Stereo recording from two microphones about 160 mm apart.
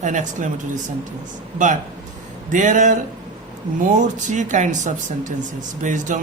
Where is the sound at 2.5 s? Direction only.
50° right (ahead or behind).